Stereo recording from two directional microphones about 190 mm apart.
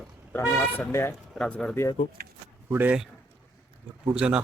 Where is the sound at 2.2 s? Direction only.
45° right (ahead or behind).